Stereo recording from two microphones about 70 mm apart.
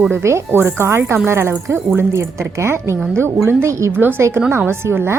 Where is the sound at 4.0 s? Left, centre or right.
Right.